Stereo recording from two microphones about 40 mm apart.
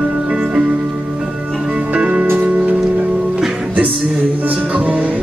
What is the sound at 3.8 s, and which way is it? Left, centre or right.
Music, right.